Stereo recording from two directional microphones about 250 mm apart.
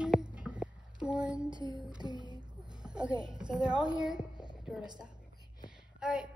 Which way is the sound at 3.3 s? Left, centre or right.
Centre.